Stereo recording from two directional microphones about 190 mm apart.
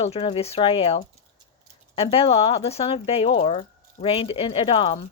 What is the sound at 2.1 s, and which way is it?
A woman's voice, 30° left (ahead or behind).